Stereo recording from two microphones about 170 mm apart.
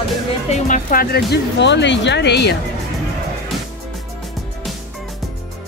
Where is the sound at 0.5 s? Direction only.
50° left (ahead or behind); by 2.5 s 80° left.